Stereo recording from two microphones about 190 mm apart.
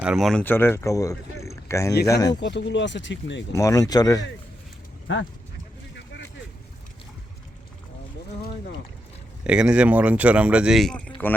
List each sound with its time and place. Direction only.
0.0 s speech: 5° right (ahead or behind); by 1.1 s 15° left (ahead or behind)
1.5 s a sound: 15° left (ahead or behind)
2.0 s speech: 20° left (ahead or behind)
2.4 s speech: 70° left (ahead or behind)
3.5 s speech: 15° left (ahead or behind)
9.4 s speech: 5° right (ahead or behind)